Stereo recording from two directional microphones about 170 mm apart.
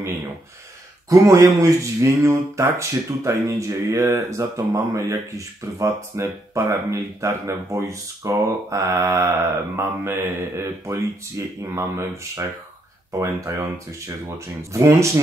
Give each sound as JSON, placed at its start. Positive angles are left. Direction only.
{"t": 1.1, "sound": "speech", "side_deg": -20}